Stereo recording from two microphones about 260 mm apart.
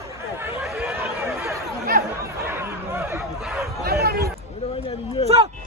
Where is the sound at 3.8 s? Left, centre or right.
Right.